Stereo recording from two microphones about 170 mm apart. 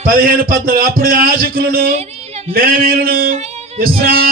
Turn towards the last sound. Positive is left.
turn(degrees=-60)  # may be behind; listen again after turning